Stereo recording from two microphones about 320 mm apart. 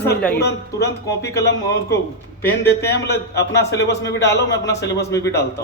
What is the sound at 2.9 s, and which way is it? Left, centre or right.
Speech, left.